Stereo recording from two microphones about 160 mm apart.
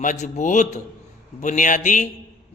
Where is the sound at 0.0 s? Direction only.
50° left (ahead or behind).